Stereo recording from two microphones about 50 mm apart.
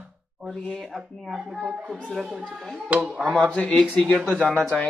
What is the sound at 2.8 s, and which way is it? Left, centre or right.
Speech, right.